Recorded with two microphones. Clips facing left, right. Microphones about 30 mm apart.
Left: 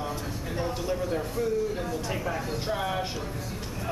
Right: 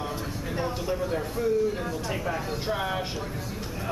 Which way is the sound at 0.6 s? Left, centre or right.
Centre.